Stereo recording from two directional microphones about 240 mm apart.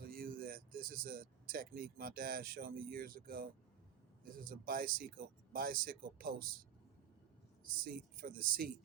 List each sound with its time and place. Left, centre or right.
0.0 s speech: right
7.8 s speech: right